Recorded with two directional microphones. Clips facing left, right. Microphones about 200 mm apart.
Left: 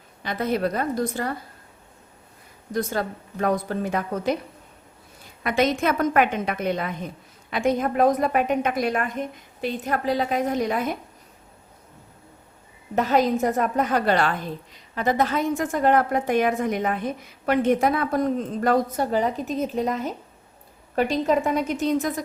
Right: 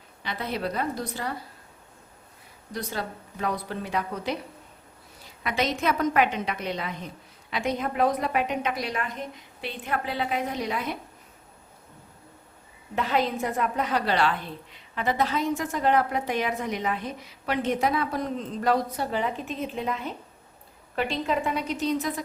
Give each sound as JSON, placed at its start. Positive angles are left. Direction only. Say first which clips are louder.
{"t": 0.2, "sound": "a woman's voice", "louder": "left 7 dB", "side_deg": 45}
{"t": 2.7, "sound": "a woman's voice", "louder": "left 7 dB", "side_deg": 50}
{"t": 5.4, "sound": "a woman's voice", "louder": "left 5 dB", "side_deg": 50}
{"t": 13.0, "sound": "a woman's voice", "louder": "left 6 dB", "side_deg": 45}